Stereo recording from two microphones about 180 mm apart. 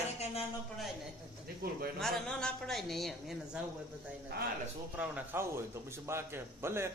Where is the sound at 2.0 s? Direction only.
5° left (ahead or behind).